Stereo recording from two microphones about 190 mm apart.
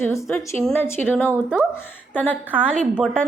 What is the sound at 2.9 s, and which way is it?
Speech, 5° left (ahead or behind).